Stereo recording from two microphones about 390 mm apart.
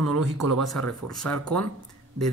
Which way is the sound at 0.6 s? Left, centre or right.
Centre.